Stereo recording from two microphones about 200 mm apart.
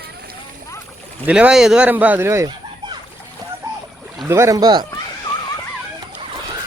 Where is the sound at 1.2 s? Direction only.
5° right (ahead or behind).